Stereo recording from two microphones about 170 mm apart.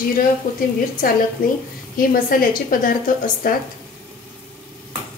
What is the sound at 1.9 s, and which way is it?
A woman's voice, 55° left (ahead or behind).